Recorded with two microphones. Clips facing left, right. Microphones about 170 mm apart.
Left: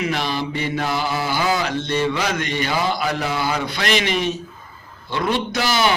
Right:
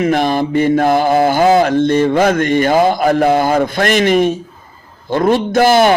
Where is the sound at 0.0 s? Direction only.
50° right (ahead or behind).